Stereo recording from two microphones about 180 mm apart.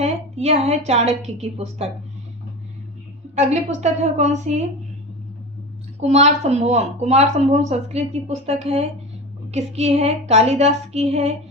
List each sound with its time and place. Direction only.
0.0 s a sound: 35° right (ahead or behind)
0.9 s speech: 35° right (ahead or behind)
3.3 s speech: 40° right (ahead or behind)
6.0 s speech: 35° right (ahead or behind)